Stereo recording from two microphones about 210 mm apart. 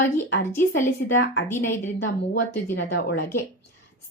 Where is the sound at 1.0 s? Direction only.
65° left (ahead or behind).